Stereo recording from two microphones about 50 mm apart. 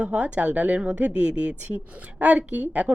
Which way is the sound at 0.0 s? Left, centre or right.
Right.